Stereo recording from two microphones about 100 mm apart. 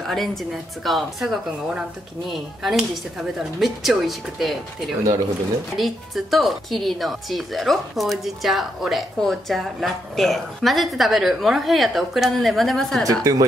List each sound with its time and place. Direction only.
0.0 s a woman's voice: centre (ahead or behind)
13.0 s a woman's voice: 35° right (ahead or behind)